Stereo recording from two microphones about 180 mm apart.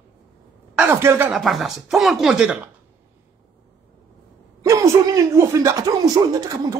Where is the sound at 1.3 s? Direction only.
Centre (ahead or behind).